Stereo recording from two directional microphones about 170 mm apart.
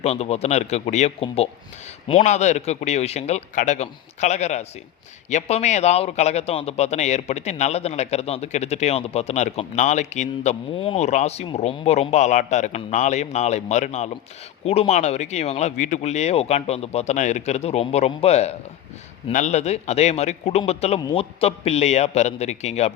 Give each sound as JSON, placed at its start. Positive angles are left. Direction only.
{"t": 0.0, "sound": "a man's voice", "side_deg": 40}